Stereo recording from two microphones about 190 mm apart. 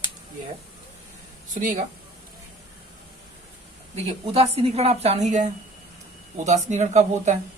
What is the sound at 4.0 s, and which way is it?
A woman's voice, 35° right (ahead or behind).